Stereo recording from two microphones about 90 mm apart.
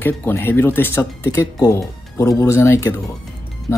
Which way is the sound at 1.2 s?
35° left (ahead or behind).